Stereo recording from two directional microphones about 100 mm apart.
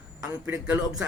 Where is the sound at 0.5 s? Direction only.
10° right (ahead or behind).